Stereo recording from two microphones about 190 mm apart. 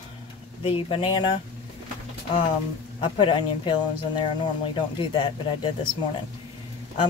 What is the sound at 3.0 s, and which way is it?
Speech, 25° left (ahead or behind).